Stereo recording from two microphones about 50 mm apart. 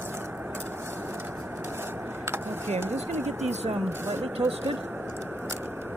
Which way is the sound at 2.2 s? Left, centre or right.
Right.